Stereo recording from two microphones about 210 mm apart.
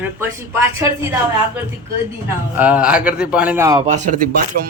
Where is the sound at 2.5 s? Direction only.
5° right (ahead or behind).